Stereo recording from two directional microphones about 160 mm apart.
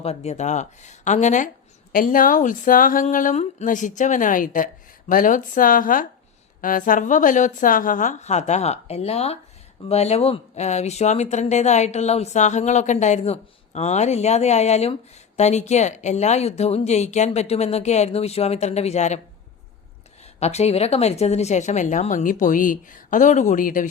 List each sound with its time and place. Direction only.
0.0 s speech: 40° left (ahead or behind)
1.9 s speech: 60° left (ahead or behind)
20.4 s speech: 45° left (ahead or behind); by 23.9 s 60° left (ahead or behind)